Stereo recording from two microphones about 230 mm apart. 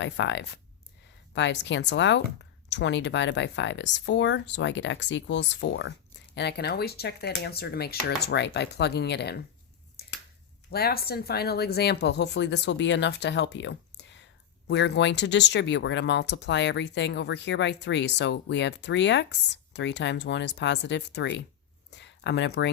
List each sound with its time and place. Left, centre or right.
0.0 s speech: left
10.0 s a sound: left
10.7 s speech: left